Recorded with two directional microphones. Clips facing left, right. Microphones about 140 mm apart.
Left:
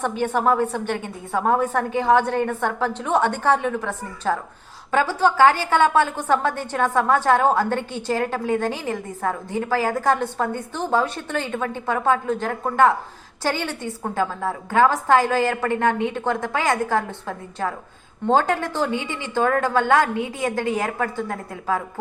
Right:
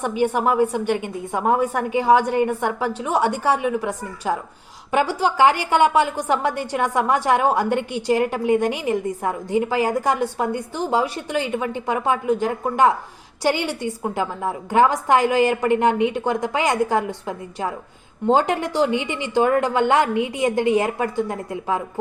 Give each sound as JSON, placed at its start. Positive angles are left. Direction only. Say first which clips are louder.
{"t": 0.0, "sound": "a woman's voice", "louder": "right 1 dB", "side_deg": -10}